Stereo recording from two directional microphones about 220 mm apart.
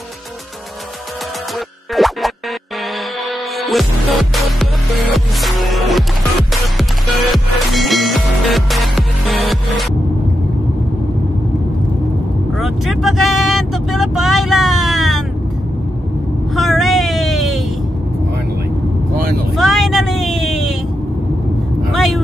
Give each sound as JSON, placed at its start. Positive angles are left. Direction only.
{"t": 2.0, "sound": "music", "side_deg": 0}
{"t": 3.6, "sound": "music", "side_deg": 0}
{"t": 12.5, "sound": "vehicle", "side_deg": 0}
{"t": 16.5, "sound": "a sound", "side_deg": 0}
{"t": 19.5, "sound": "a sound", "side_deg": 0}
{"t": 21.9, "sound": "vehicle", "side_deg": 0}